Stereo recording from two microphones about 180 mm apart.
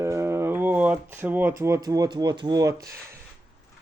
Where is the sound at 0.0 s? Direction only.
15° right (ahead or behind).